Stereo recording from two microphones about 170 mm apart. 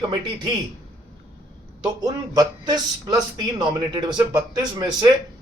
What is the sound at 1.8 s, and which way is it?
Speech, 25° right (ahead or behind).